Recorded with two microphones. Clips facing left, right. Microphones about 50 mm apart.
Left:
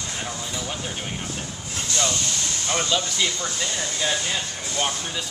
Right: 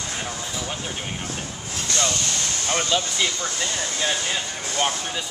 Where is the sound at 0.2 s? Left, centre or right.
Centre.